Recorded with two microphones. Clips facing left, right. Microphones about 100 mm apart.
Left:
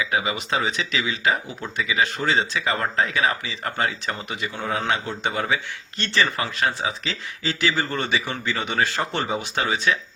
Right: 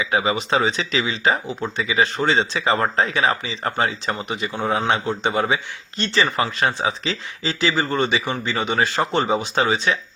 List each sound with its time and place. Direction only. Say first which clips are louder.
0.0 s speech: right 4 dB; 30° right (ahead or behind)